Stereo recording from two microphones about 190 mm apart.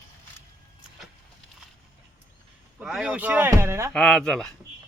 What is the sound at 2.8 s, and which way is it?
Speech, 5° right (ahead or behind).